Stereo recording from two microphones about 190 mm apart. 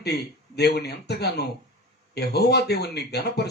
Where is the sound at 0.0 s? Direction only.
60° left (ahead or behind).